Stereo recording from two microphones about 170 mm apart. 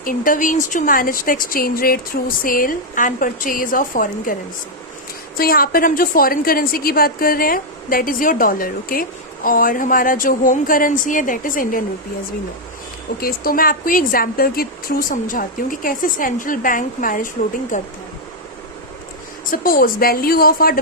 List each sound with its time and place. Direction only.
0.0 s a woman's voice: 55° left (ahead or behind)
5.4 s a woman's voice: 60° left (ahead or behind)
13.1 s a woman's voice: 60° left (ahead or behind)
19.5 s a woman's voice: 55° left (ahead or behind)